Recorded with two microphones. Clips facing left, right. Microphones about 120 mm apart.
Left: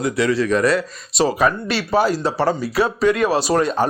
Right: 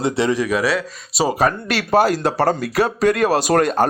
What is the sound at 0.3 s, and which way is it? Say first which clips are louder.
Speech: left 2 dB; 10° right (ahead or behind).